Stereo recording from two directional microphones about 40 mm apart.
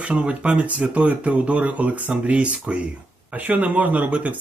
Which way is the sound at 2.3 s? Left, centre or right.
Right.